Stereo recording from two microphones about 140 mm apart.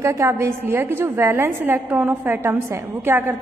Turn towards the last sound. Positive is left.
turn(degrees=-15)  # may be behind; listen again after turning